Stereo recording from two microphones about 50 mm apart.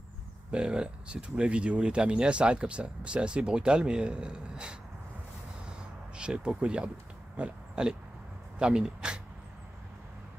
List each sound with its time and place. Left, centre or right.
0.5 s speech: centre
5.7 s a sound: centre
7.3 s oink: right
8.5 s speech: centre